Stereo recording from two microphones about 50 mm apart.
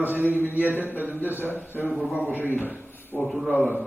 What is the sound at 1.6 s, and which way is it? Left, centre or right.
Speech, left.